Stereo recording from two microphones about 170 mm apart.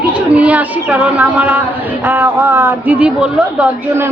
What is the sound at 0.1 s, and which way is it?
A woman's voice, 10° right (ahead or behind).